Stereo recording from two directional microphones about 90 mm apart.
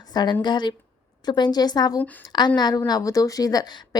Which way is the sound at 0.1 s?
50° left (ahead or behind).